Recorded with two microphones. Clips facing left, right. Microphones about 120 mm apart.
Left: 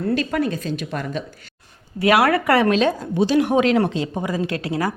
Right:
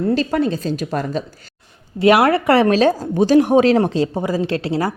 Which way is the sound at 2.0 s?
25° right (ahead or behind).